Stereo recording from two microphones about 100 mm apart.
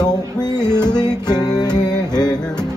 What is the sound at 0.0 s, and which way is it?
Music, 45° left (ahead or behind).